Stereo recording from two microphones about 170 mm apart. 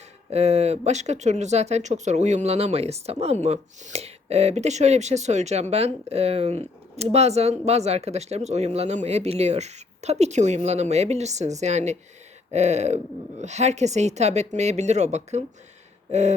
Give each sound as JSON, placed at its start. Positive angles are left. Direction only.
{"t": 0.3, "sound": "speech", "side_deg": -40}